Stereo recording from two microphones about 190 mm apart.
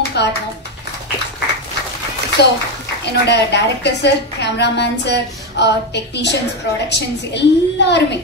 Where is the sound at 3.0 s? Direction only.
65° left (ahead or behind).